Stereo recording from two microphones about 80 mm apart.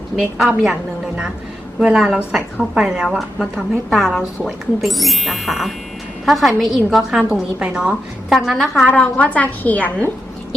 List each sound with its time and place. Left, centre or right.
0.6 s a woman's voice: centre
7.6 s a woman's voice: centre
8.3 s a woman's voice: centre
8.9 s a woman's voice: centre